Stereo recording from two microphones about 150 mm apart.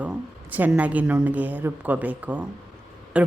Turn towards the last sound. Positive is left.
turn(degrees=-10)  # may be behind; listen again after turning